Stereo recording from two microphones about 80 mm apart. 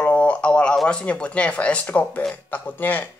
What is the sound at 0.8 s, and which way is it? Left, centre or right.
A man's voice, centre.